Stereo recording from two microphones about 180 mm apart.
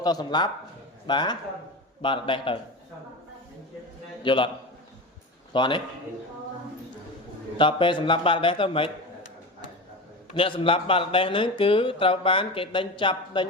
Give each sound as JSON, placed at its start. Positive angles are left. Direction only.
{"t": 0.0, "sound": "speech", "side_deg": 20}
{"t": 4.2, "sound": "speech", "side_deg": 25}
{"t": 5.5, "sound": "speech", "side_deg": 25}
{"t": 7.6, "sound": "speech", "side_deg": 25}
{"t": 10.3, "sound": "speech", "side_deg": 30}